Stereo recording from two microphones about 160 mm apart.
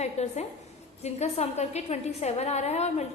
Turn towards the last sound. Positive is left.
turn(degrees=45)  # may be behind; listen again after turning